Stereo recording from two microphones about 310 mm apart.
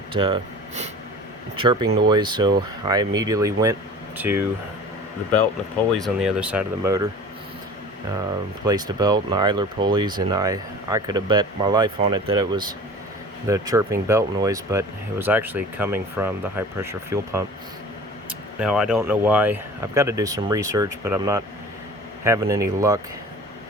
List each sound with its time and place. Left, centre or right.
0.1 s speech: centre
6.0 s speech: centre
8.6 s speech: centre
18.6 s speech: centre